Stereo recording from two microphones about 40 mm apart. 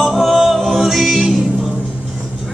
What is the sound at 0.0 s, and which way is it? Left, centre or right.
Music, centre.